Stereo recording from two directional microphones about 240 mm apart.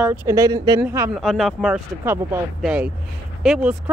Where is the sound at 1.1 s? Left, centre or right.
Centre.